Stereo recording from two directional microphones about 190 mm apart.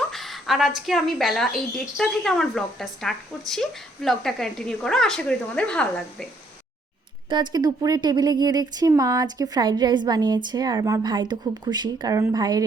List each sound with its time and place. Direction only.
0.1 s a sound: centre (ahead or behind)
0.9 s speech: centre (ahead or behind)
7.3 s speech: 20° right (ahead or behind)